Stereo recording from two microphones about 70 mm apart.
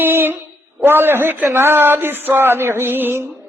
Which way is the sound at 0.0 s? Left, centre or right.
Right.